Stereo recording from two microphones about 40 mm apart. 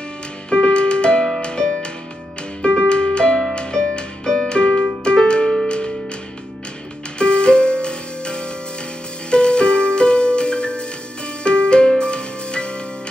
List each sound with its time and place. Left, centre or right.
0.5 s music: left
2.9 s music: left
7.2 s music: left